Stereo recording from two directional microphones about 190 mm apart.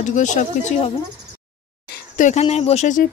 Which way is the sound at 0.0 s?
40° left (ahead or behind).